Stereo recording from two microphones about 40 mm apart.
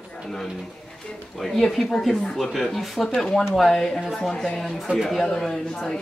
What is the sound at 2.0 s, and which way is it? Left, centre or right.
A man's voice, centre.